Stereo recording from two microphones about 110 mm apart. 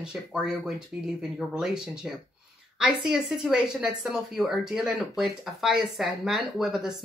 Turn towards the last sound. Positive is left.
turn(degrees=-5)  # may be behind; listen again after turning